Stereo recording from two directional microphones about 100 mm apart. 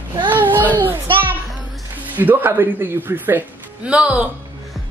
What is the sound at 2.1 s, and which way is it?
Speech, 20° right (ahead or behind).